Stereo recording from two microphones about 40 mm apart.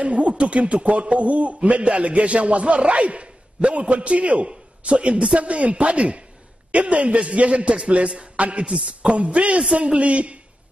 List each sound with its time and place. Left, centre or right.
0.0 s a man's voice: right